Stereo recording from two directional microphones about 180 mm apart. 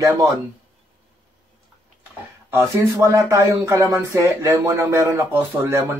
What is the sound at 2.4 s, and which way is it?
Speech, 15° right (ahead or behind).